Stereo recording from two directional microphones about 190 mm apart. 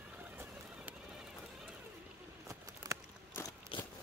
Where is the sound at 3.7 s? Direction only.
25° left (ahead or behind).